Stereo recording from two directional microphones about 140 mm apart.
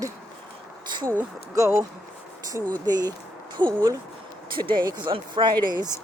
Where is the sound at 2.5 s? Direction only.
30° right (ahead or behind).